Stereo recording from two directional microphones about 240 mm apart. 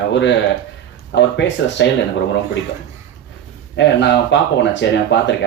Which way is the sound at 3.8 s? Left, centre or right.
Left.